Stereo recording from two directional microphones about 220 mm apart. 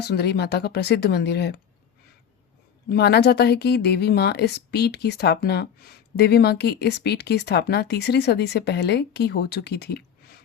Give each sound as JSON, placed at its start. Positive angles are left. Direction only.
{"t": 0.0, "sound": "speech", "side_deg": 50}
{"t": 2.9, "sound": "speech", "side_deg": 45}